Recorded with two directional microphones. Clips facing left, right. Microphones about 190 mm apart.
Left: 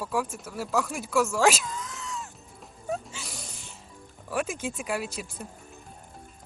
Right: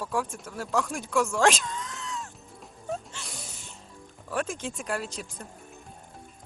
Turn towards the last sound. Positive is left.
turn(degrees=10)  # may be behind; listen again after turning